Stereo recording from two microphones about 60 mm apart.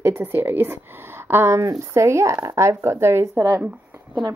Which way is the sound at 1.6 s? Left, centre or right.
Right.